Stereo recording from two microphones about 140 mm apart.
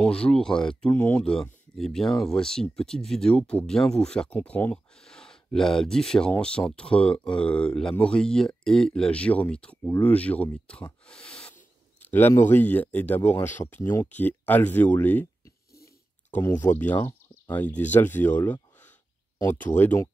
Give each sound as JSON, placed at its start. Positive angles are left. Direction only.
{"t": 0.0, "sound": "speech", "side_deg": 5}
{"t": 15.7, "sound": "a sound", "side_deg": 90}
{"t": 16.3, "sound": "speech", "side_deg": 15}